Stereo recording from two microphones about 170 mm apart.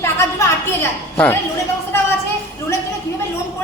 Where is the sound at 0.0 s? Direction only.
15° left (ahead or behind).